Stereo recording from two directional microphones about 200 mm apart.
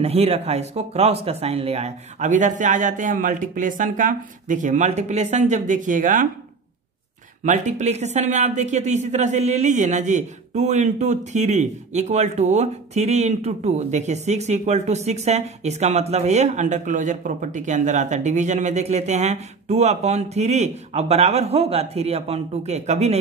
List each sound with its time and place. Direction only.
0.0 s speech: 30° right (ahead or behind)
7.4 s speech: 35° right (ahead or behind)